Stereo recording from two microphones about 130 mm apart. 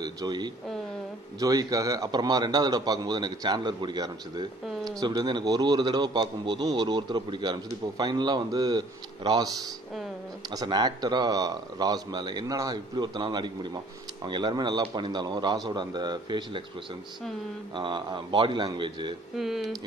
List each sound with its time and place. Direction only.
0.0 s a man's voice: 30° right (ahead or behind)
10.5 s a man's voice: 30° right (ahead or behind)
17.7 s a man's voice: 40° right (ahead or behind)
19.3 s speech: centre (ahead or behind)